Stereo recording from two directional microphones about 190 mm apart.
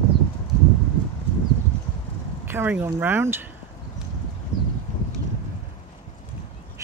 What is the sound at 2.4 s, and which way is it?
Speech, 10° right (ahead or behind).